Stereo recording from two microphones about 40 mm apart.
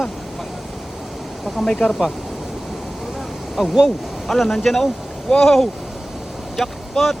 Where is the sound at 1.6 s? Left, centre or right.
Centre.